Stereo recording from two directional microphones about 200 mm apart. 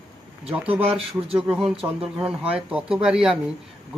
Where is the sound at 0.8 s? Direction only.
30° right (ahead or behind).